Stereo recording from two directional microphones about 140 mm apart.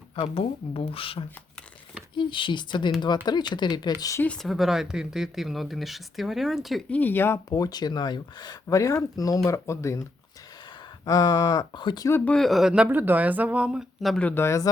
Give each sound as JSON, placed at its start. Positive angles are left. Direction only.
{"t": 0.2, "sound": "speech", "side_deg": 40}
{"t": 4.2, "sound": "speech", "side_deg": 5}
{"t": 6.9, "sound": "speech", "side_deg": 15}
{"t": 7.5, "sound": "speech", "side_deg": 30}
{"t": 11.0, "sound": "speech", "side_deg": 25}
{"t": 12.0, "sound": "speech", "side_deg": 15}
{"t": 12.3, "sound": "speech", "side_deg": 0}